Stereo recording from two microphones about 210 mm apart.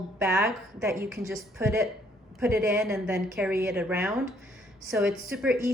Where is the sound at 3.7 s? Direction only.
Centre (ahead or behind).